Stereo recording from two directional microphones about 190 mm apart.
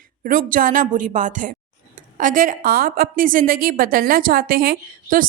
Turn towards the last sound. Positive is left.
turn(degrees=-50)  # may be behind; listen again after turning